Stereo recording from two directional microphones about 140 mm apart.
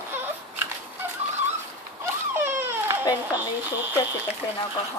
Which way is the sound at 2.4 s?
15° right (ahead or behind).